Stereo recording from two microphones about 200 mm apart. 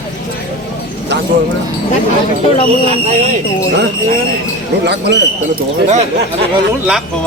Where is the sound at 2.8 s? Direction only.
35° right (ahead or behind).